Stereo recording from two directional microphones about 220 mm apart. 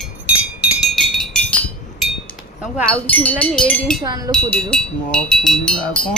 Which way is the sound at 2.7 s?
5° left (ahead or behind).